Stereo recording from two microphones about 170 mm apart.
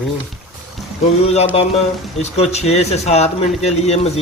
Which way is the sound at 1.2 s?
40° left (ahead or behind).